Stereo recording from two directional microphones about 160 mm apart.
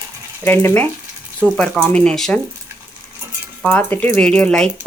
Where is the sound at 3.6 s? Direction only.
10° left (ahead or behind).